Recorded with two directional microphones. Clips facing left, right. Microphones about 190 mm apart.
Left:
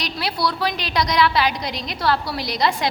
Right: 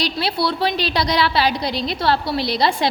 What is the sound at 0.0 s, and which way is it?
A woman's voice, 30° right (ahead or behind).